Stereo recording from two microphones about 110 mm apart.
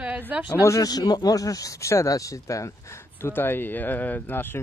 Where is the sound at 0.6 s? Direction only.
30° left (ahead or behind).